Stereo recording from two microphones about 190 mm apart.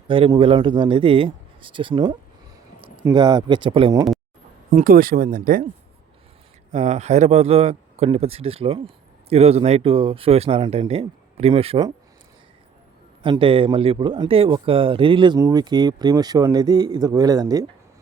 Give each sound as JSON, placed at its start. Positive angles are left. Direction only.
{"t": 0.1, "sound": "speech", "side_deg": -25}
{"t": 4.7, "sound": "speech", "side_deg": -45}
{"t": 6.7, "sound": "speech", "side_deg": -40}
{"t": 13.2, "sound": "speech", "side_deg": -25}